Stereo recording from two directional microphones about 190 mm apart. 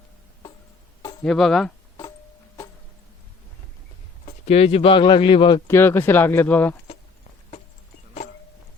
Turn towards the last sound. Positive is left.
turn(degrees=10)  # may be behind; listen again after turning